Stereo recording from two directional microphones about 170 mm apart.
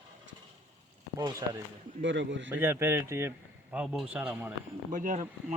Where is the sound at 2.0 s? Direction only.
90° right.